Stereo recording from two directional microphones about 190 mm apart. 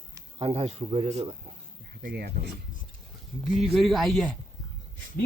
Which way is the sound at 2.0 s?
55° right (ahead or behind).